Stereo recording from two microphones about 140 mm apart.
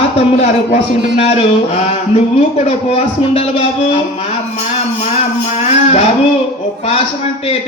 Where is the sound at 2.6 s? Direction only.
50° left (ahead or behind).